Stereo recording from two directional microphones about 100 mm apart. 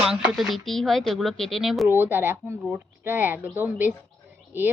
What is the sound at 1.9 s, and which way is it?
Speech, 20° right (ahead or behind).